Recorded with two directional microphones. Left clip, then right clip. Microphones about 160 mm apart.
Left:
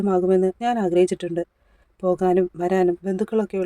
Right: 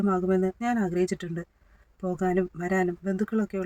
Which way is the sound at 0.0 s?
30° left (ahead or behind).